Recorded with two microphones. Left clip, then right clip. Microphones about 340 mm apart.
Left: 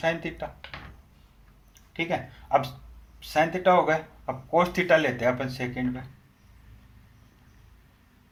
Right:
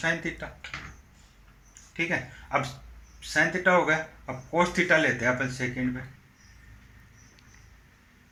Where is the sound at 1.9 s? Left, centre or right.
Left.